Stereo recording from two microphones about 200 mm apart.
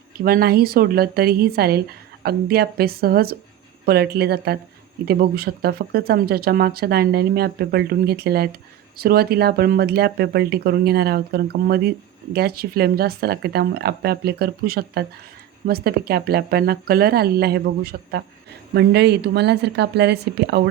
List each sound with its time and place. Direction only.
0.3 s a woman's voice: 50° right (ahead or behind)